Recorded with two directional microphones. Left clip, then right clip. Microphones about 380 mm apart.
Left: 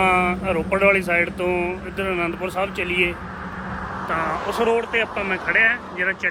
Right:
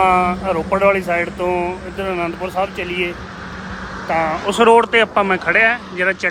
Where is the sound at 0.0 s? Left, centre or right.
Centre.